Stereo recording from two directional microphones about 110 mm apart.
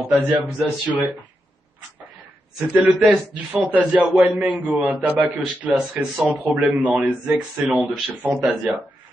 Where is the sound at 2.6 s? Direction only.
15° right (ahead or behind).